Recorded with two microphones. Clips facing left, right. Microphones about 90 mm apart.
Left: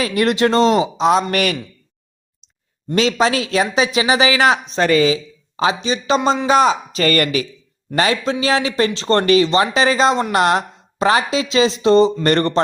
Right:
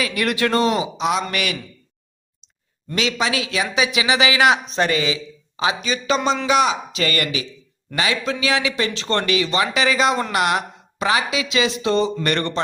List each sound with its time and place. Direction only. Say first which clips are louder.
0.0 s speech: left 5 dB; 30° left (ahead or behind)
1.0 s speech: left 7 dB; 40° left (ahead or behind)
2.9 s speech: left 6 dB; 40° left (ahead or behind)